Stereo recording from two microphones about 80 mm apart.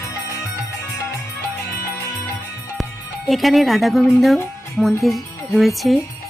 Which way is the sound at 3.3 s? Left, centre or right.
Centre.